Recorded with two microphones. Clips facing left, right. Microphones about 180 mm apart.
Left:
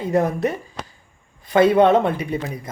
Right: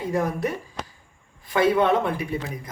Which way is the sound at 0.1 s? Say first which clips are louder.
Left 6 dB; 20° left (ahead or behind).